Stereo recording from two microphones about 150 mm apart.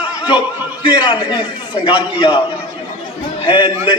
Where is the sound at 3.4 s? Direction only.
30° left (ahead or behind).